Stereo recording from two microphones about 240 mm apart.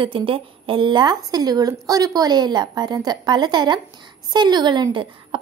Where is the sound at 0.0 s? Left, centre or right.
Right.